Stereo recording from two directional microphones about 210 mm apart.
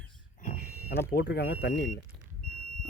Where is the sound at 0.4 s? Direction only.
45° left (ahead or behind).